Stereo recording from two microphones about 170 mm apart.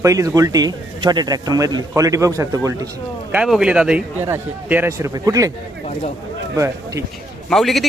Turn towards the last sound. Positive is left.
turn(degrees=0)  # may be behind; listen again after turning